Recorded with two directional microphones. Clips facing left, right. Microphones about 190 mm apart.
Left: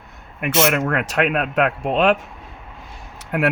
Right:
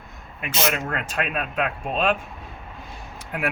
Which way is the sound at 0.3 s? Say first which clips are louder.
Left 7 dB; 60° left (ahead or behind).